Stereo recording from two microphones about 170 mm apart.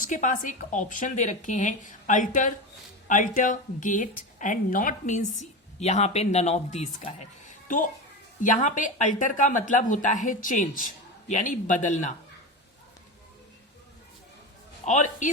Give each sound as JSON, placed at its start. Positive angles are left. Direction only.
{"t": 0.0, "sound": "a woman's voice", "side_deg": 45}
{"t": 14.8, "sound": "a woman's voice", "side_deg": 45}